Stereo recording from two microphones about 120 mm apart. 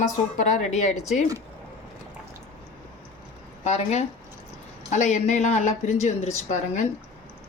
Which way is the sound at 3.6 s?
70° left (ahead or behind).